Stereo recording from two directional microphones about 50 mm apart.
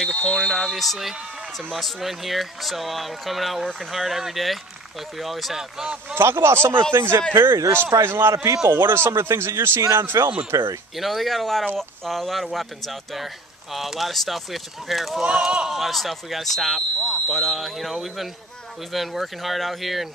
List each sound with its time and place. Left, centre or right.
0.0 s a sound: centre
0.5 s speech: centre
6.1 s speech: right
7.0 s speech: right
8.0 s speech: right
10.1 s speech: right
11.0 s speech: centre
15.2 s speech: centre
15.7 s speech: centre